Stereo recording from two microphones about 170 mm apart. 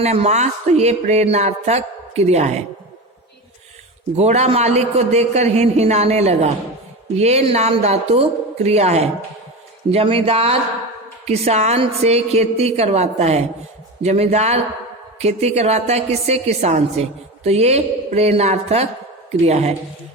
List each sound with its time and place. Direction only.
0.0 s a woman's voice: 40° right (ahead or behind)
4.2 s a woman's voice: 40° right (ahead or behind)